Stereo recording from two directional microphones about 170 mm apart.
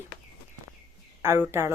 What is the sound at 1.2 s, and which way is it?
Speech, 15° right (ahead or behind).